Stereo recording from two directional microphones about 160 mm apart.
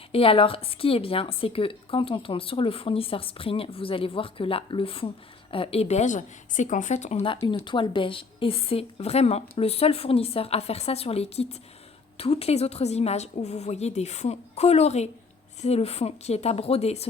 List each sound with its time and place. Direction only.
0.1 s a woman's voice: 35° left (ahead or behind)